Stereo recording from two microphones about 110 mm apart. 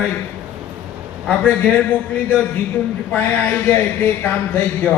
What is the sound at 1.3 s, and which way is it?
Speech, 15° left (ahead or behind).